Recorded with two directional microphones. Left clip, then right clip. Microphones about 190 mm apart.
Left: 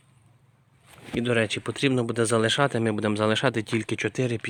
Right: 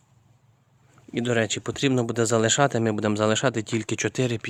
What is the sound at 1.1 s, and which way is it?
Speech, 5° right (ahead or behind).